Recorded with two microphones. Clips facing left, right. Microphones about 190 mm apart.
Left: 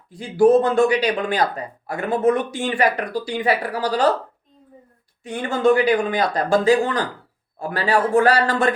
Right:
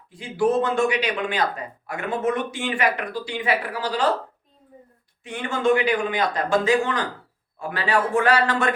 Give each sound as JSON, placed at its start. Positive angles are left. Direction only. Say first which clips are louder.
{"t": 0.1, "sound": "speech", "louder": "left 7 dB", "side_deg": 40}
{"t": 5.2, "sound": "speech", "louder": "left 4 dB", "side_deg": 40}